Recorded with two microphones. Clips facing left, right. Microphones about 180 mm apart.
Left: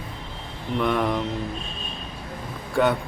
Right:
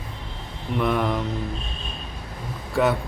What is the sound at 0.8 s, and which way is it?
Speech, centre (ahead or behind).